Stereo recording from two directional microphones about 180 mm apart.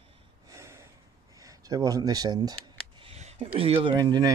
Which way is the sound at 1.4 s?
20° right (ahead or behind).